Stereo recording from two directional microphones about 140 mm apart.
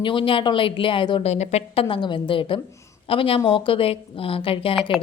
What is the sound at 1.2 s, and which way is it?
Speech, 50° left (ahead or behind).